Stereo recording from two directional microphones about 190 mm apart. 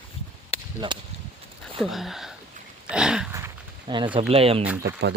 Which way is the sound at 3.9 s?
25° right (ahead or behind).